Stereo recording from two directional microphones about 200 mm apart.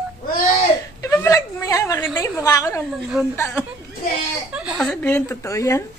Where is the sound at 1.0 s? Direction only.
15° left (ahead or behind).